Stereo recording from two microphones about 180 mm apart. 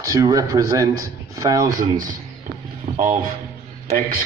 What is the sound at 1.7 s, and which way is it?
Speech, 45° right (ahead or behind).